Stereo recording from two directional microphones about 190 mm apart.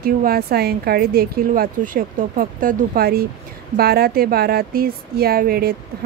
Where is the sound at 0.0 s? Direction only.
50° right (ahead or behind).